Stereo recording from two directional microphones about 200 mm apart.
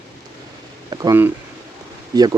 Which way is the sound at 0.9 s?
15° right (ahead or behind).